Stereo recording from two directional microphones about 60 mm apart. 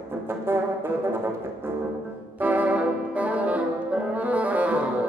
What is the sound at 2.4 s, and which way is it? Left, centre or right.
Brass instrument, right.